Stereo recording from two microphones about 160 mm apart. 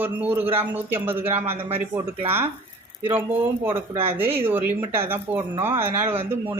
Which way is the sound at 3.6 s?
15° right (ahead or behind).